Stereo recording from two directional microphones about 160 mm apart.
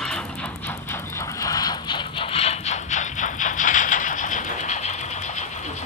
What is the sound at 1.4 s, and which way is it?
Vehicle, 25° left (ahead or behind).